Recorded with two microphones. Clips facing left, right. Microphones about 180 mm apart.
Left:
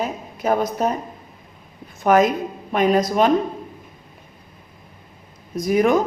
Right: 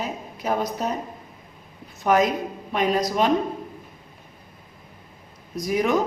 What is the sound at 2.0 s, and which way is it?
Speech, 50° left (ahead or behind).